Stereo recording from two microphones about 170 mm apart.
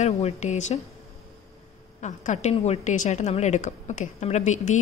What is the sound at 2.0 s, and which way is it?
A woman's voice, 45° left (ahead or behind).